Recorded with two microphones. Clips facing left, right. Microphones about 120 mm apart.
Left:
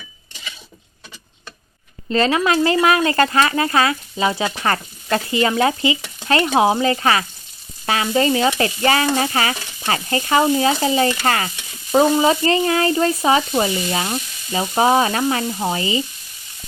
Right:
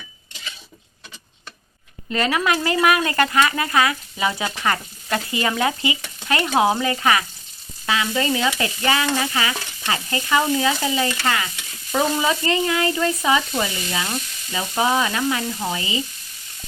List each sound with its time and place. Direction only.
2.0 s speech: 30° left (ahead or behind)
4.6 s speech: 35° left (ahead or behind)
7.9 s stir: 35° left (ahead or behind)